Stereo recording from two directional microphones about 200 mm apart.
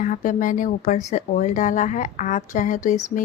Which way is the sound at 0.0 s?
40° left (ahead or behind).